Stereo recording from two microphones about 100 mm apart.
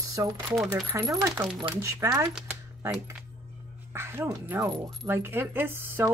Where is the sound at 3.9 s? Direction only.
25° right (ahead or behind).